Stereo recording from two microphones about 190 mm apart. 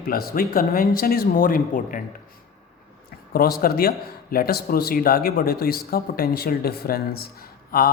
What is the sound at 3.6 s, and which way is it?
Speech, 50° left (ahead or behind).